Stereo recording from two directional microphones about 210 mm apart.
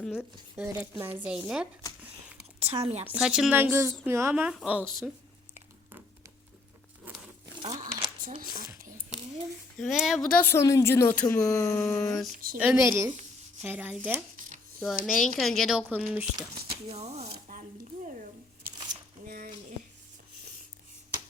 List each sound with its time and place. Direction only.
0.0 s speech: 5° right (ahead or behind)
2.7 s speech: 30° right (ahead or behind)
3.2 s speech: centre (ahead or behind)
7.6 s a sound: 25° right (ahead or behind)
9.7 s speech: centre (ahead or behind)
10.4 s speech: 15° left (ahead or behind)
12.5 s speech: 10° right (ahead or behind)
16.6 s speech: 25° right (ahead or behind)
17.3 s a sound: 40° right (ahead or behind)
19.2 s a sound: 40° right (ahead or behind)